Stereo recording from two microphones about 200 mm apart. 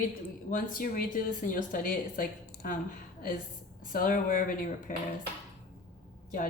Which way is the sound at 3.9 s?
45° left (ahead or behind).